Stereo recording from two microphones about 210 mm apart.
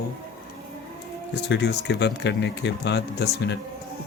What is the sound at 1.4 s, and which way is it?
Speech, 55° left (ahead or behind).